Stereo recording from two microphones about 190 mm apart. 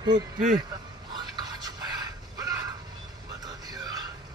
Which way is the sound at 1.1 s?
20° right (ahead or behind).